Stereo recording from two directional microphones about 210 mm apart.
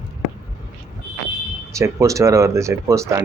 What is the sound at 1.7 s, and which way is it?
Speech, 15° right (ahead or behind).